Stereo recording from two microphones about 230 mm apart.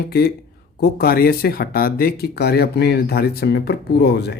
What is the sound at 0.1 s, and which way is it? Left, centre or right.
Speech, left.